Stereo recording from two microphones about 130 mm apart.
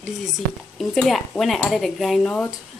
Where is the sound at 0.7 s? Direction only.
Centre (ahead or behind).